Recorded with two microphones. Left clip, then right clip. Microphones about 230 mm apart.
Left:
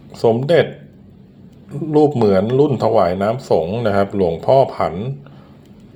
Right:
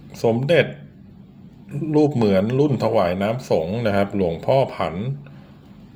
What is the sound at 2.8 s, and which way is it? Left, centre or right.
Speech, centre.